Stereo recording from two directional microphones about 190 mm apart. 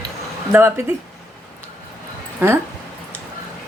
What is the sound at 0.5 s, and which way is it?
Speech, 15° right (ahead or behind).